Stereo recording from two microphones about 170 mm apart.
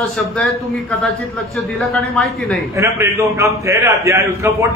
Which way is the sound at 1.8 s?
Centre (ahead or behind).